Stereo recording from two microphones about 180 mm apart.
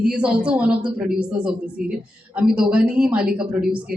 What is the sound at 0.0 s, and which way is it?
A man's voice, 5° right (ahead or behind).